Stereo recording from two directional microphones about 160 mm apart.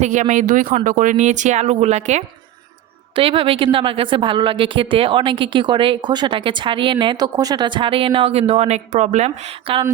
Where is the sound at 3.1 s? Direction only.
35° right (ahead or behind).